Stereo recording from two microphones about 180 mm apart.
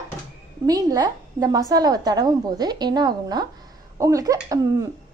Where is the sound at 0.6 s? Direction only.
20° right (ahead or behind).